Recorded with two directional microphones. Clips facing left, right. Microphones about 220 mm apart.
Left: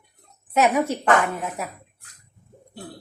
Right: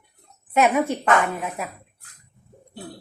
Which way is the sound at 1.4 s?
Centre (ahead or behind).